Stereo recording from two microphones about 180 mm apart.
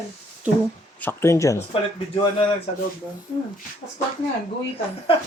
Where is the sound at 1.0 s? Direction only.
15° left (ahead or behind).